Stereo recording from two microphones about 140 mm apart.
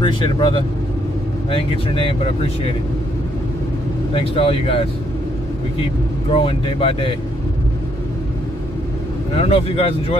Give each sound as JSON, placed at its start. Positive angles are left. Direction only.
{"t": 0.0, "sound": "speech", "side_deg": 35}
{"t": 4.1, "sound": "speech", "side_deg": 45}
{"t": 6.3, "sound": "speech", "side_deg": 40}
{"t": 9.3, "sound": "speech", "side_deg": 45}